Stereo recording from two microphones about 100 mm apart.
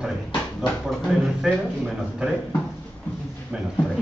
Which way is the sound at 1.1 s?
5° right (ahead or behind).